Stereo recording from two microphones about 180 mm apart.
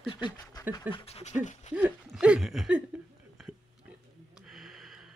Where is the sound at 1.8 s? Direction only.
5° right (ahead or behind).